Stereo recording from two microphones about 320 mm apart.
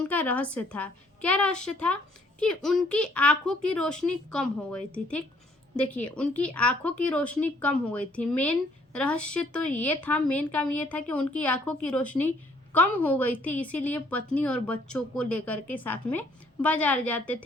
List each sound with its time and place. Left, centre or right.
0.1 s speech: centre